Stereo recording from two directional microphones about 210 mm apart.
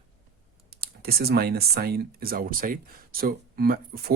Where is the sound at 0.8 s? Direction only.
45° right (ahead or behind).